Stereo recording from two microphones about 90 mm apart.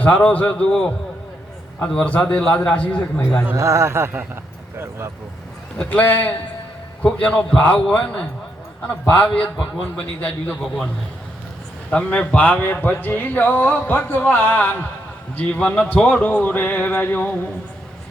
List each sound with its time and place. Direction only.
0.0 s speech: 15° left (ahead or behind)
3.5 s speech: 35° right (ahead or behind)
5.7 s speech: 20° left (ahead or behind)
11.9 s speech: 15° left (ahead or behind)